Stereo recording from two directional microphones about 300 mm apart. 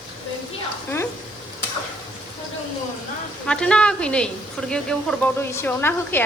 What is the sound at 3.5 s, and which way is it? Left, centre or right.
A woman's voice, centre.